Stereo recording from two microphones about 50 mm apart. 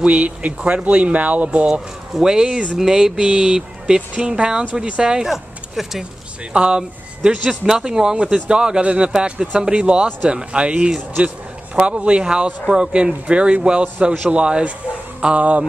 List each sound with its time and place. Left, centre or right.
0.0 s speech: right
1.7 s speech: centre
6.5 s speech: right